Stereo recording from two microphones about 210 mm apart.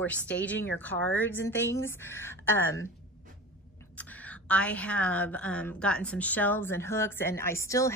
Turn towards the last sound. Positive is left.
turn(degrees=15)  # may be behind; listen again after turning